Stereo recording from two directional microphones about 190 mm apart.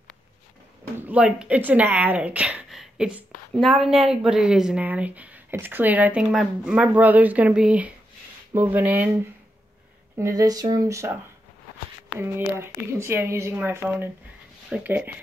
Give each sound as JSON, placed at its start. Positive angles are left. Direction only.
{"t": 0.9, "sound": "a woman's voice", "side_deg": -10}
{"t": 10.1, "sound": "a woman's voice", "side_deg": -15}
{"t": 12.2, "sound": "a woman's voice", "side_deg": -15}